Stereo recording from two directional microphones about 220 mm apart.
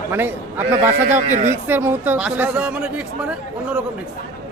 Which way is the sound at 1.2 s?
35° right (ahead or behind).